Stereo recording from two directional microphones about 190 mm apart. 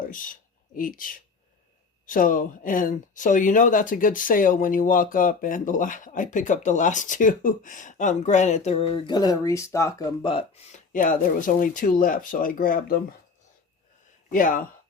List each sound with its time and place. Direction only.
0.0 s speech: 45° left (ahead or behind)
14.3 s speech: 45° left (ahead or behind)